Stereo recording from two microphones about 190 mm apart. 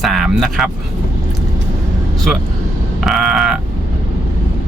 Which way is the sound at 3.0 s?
Centre (ahead or behind).